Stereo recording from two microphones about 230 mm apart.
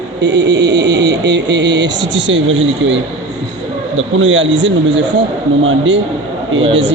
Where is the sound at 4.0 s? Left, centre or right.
Right.